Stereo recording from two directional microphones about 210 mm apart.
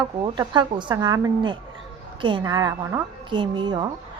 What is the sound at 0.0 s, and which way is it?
A woman's voice, 20° right (ahead or behind).